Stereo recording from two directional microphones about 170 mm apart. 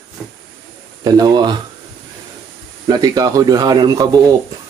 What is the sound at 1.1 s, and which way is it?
Speech, 20° right (ahead or behind).